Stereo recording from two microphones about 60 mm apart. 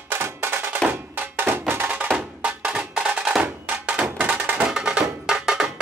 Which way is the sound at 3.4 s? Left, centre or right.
Right.